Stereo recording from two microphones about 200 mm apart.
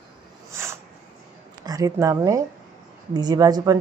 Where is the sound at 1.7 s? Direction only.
15° right (ahead or behind).